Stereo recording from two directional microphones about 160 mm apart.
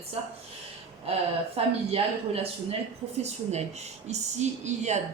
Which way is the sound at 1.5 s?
40° right (ahead or behind).